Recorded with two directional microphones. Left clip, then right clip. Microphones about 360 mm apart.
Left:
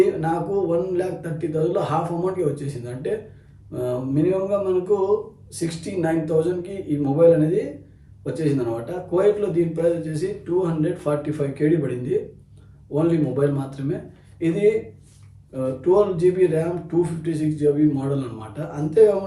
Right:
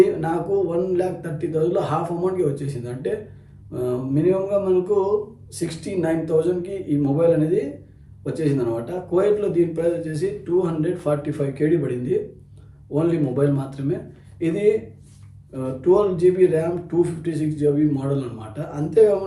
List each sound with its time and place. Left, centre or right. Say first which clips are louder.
0.0 s a man's voice: right 1 dB; centre